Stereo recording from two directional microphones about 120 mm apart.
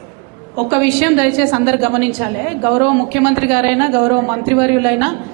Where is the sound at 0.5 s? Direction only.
20° right (ahead or behind).